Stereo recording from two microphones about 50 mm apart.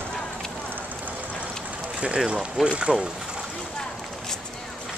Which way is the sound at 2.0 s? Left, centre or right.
Right.